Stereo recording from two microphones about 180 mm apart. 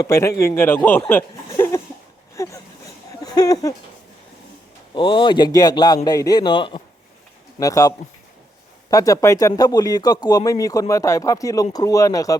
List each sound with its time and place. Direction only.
0.0 s speech: 15° left (ahead or behind)
2.3 s a sound: 15° left (ahead or behind)
4.9 s speech: 25° left (ahead or behind)